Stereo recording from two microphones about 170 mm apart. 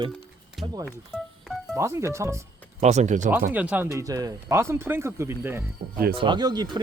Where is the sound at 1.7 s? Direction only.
15° right (ahead or behind).